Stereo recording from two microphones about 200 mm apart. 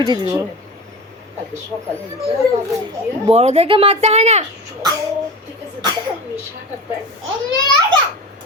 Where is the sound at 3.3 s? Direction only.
30° right (ahead or behind).